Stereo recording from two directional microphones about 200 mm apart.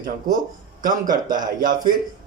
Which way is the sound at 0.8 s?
40° right (ahead or behind).